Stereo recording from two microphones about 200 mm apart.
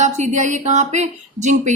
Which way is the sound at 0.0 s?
35° right (ahead or behind).